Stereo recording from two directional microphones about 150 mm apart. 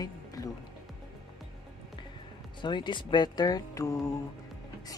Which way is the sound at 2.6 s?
30° left (ahead or behind).